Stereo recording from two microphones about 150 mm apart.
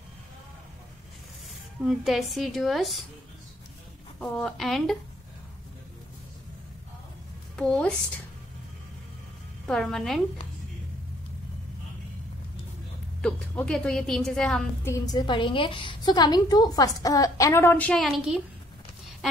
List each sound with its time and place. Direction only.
1.9 s a woman's voice: centre (ahead or behind)
4.2 s a woman's voice: 5° left (ahead or behind)
7.5 s a woman's voice: 5° left (ahead or behind)
9.7 s a woman's voice: centre (ahead or behind)
13.2 s a woman's voice: 5° left (ahead or behind)
14.9 s a woman's voice: 25° left (ahead or behind); by 18.4 s 5° right (ahead or behind)